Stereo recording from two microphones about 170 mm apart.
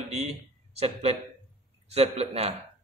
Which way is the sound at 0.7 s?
40° right (ahead or behind).